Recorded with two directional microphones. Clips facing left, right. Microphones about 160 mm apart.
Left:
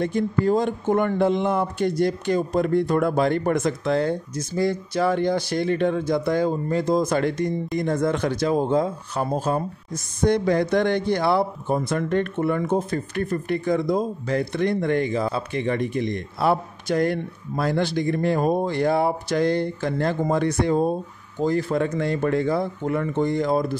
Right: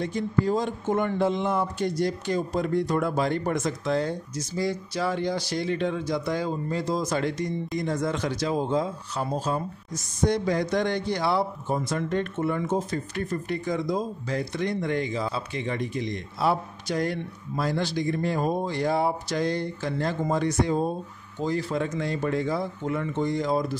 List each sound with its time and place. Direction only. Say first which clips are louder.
0.0 s speech: left 4 dB; 55° left (ahead or behind)